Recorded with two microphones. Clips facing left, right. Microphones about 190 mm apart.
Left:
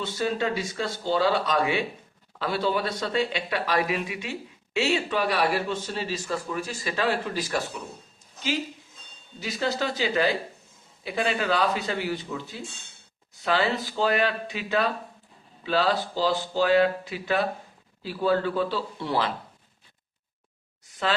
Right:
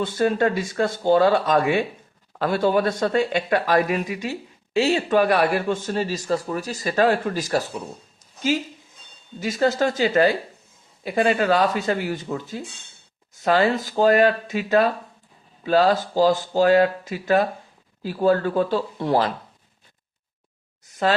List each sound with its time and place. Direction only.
0.0 s speech: 50° right (ahead or behind)
9.4 s speech: 45° right (ahead or behind)